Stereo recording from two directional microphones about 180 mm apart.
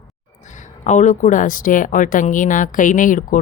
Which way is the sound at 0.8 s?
40° left (ahead or behind).